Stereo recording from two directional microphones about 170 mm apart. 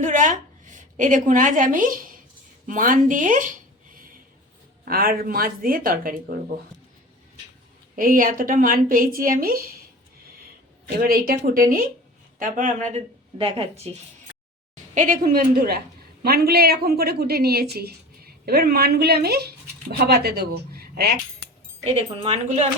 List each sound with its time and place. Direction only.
0.0 s a woman's voice: 45° right (ahead or behind)
4.9 s a woman's voice: 60° right (ahead or behind)
7.9 s a woman's voice: 55° right (ahead or behind)
10.8 s a woman's voice: 60° right (ahead or behind)
13.4 s speech: 35° right (ahead or behind)
14.9 s a woman's voice: 55° right (ahead or behind)
21.9 s speech: 35° right (ahead or behind)